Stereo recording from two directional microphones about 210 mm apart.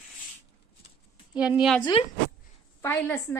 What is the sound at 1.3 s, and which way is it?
Speech, 5° right (ahead or behind).